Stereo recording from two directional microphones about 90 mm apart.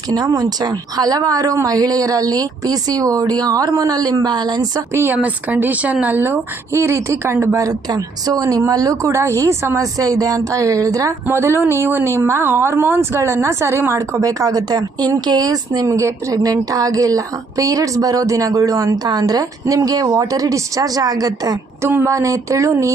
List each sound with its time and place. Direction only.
0.1 s a woman's voice: 45° right (ahead or behind)
4.9 s a woman's voice: 20° right (ahead or behind); by 11.1 s 40° right (ahead or behind)
11.3 s a woman's voice: 30° right (ahead or behind); by 21.6 s 45° right (ahead or behind)
21.8 s a woman's voice: 30° right (ahead or behind)